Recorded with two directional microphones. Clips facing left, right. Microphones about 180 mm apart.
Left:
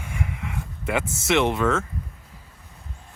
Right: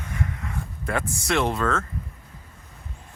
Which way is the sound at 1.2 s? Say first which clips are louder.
Left 3 dB; centre (ahead or behind).